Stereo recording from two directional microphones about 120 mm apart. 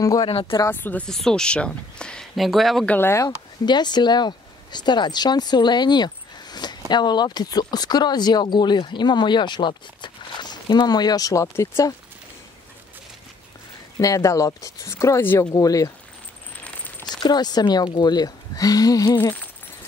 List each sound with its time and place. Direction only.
0.0 s speech: 30° left (ahead or behind)
0.3 s speech: 50° left (ahead or behind)
0.7 s speech: 15° left (ahead or behind)
1.0 s speech: 5° left (ahead or behind)
2.9 s speech: 20° left (ahead or behind)
3.6 s speech: 35° left (ahead or behind)
13.9 s speech: 30° left (ahead or behind)
16.6 s coin: 10° left (ahead or behind)
17.1 s speech: 35° left (ahead or behind)
19.1 s speech: 15° left (ahead or behind)